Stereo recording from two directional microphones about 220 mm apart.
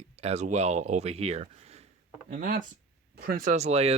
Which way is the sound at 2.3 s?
40° right (ahead or behind).